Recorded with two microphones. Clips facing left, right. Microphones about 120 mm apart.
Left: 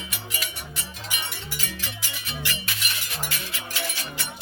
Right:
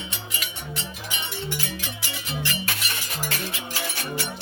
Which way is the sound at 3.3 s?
35° right (ahead or behind).